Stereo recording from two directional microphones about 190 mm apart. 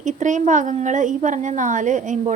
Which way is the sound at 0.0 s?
40° right (ahead or behind).